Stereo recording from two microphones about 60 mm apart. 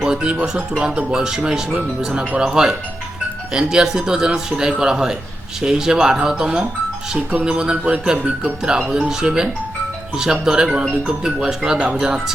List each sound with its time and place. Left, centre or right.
0.0 s speech: centre